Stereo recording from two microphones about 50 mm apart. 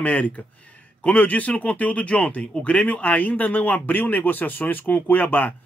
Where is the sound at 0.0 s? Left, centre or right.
Left.